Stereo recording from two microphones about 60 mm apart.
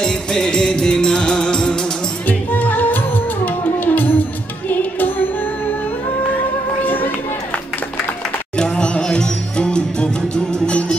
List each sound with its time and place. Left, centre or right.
0.0 s music: centre
2.2 s music: left
6.8 s music: left
8.5 s music: centre